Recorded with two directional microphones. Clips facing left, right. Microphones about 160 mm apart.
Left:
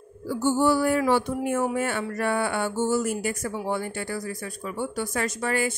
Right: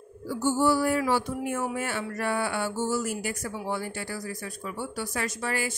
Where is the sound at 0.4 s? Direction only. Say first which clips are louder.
Left 2 dB; 55° left (ahead or behind).